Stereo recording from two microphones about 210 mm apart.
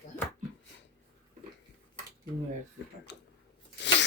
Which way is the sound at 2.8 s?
55° left (ahead or behind).